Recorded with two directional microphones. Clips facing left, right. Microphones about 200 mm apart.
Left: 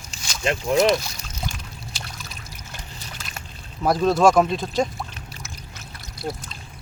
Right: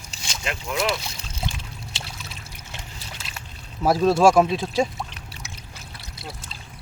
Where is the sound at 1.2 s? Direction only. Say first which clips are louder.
Right 1 dB; 25° right (ahead or behind).